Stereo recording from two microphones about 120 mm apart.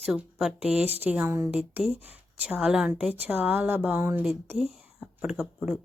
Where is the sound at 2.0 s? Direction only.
15° right (ahead or behind).